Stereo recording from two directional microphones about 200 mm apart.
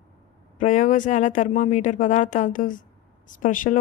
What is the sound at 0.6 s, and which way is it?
Speech, 40° left (ahead or behind).